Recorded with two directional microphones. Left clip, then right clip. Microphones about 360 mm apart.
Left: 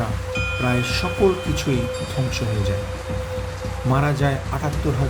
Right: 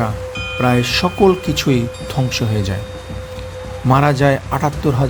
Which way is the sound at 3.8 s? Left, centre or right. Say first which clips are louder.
Right 9 dB; right.